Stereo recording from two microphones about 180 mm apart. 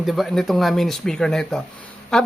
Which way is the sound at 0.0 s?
Centre (ahead or behind).